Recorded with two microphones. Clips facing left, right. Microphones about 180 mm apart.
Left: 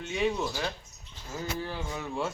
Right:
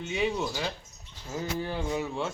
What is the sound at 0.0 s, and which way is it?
Speech, 5° right (ahead or behind).